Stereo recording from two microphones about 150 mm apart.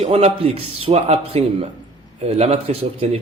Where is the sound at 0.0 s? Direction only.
40° right (ahead or behind).